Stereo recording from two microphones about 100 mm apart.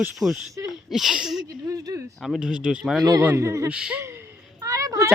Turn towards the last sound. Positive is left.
turn(degrees=-35)  # may be behind; listen again after turning